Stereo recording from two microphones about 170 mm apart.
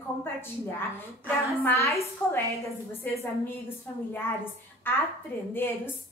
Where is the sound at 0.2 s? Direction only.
15° left (ahead or behind).